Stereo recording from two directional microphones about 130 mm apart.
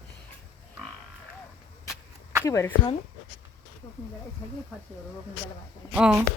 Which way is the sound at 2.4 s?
20° left (ahead or behind).